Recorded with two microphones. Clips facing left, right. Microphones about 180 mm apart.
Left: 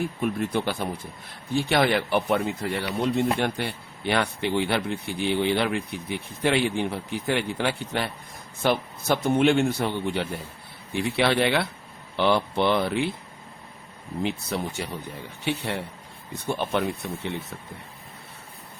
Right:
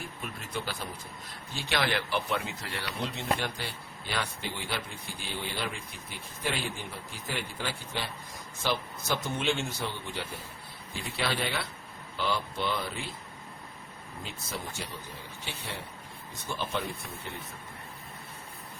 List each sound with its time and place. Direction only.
0.2 s speech: 65° left (ahead or behind)
14.2 s speech: 70° left (ahead or behind)